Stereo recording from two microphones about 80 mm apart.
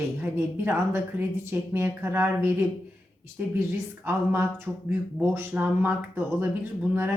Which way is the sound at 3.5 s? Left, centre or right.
Right.